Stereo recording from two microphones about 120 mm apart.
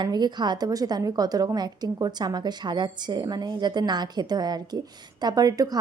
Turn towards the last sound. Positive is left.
turn(degrees=-30)  # may be behind; listen again after turning